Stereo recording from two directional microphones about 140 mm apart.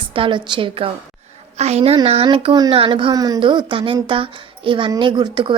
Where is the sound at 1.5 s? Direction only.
50° right (ahead or behind).